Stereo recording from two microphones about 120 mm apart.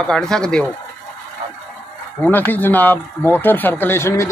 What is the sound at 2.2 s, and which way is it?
Speech, 15° left (ahead or behind).